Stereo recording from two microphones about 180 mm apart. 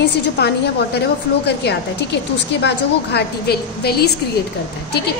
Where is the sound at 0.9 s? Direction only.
65° left (ahead or behind).